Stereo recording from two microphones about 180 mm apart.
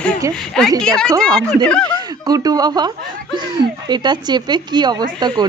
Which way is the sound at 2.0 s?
20° right (ahead or behind).